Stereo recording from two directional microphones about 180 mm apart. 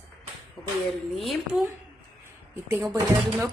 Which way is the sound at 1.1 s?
Centre (ahead or behind).